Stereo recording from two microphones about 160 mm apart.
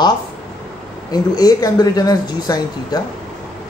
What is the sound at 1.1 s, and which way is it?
Speech, 25° left (ahead or behind).